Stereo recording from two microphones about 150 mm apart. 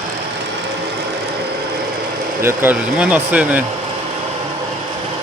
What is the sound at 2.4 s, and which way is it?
Speech, 15° right (ahead or behind).